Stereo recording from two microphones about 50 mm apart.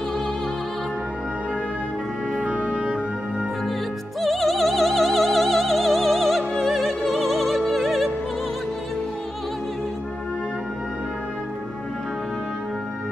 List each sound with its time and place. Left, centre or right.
2.4 s music: right
4.2 s opera: centre